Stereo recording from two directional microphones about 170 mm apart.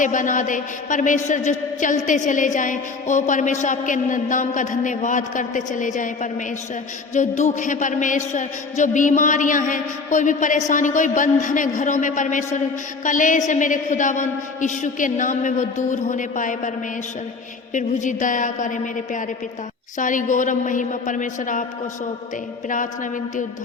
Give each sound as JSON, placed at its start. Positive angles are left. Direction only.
{"t": 0.0, "sound": "a woman's voice", "side_deg": 50}
{"t": 7.1, "sound": "a woman's voice", "side_deg": 45}
{"t": 17.7, "sound": "a woman's voice", "side_deg": 50}